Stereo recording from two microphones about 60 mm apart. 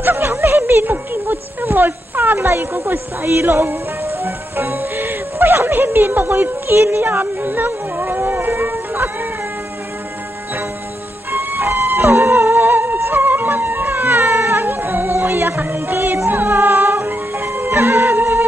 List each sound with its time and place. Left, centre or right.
0.0 s a sound: right
2.3 s speech: right
7.1 s music: right
11.3 s music: right